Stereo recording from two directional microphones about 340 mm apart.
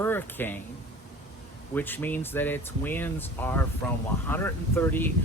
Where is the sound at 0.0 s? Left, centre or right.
Centre.